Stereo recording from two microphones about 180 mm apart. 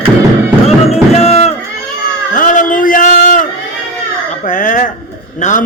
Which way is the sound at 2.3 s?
45° left (ahead or behind).